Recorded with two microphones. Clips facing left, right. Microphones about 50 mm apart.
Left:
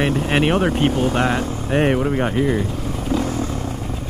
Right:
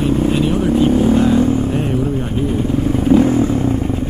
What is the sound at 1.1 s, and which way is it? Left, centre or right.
Speech, left.